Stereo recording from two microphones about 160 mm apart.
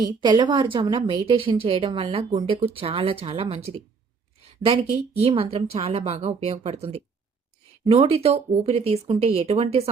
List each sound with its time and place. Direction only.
0.0 s a woman's voice: 30° right (ahead or behind)
5.2 s a woman's voice: 35° right (ahead or behind)